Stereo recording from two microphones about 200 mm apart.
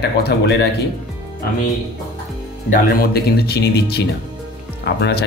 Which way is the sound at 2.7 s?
45° left (ahead or behind).